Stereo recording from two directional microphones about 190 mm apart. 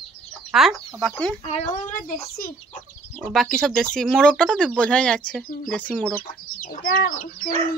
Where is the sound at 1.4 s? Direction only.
35° left (ahead or behind); by 2.8 s 50° left (ahead or behind).